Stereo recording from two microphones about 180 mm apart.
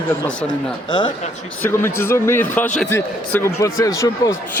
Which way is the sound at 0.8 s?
25° left (ahead or behind).